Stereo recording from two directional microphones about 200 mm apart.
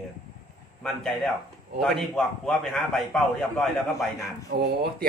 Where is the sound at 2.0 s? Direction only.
Centre (ahead or behind).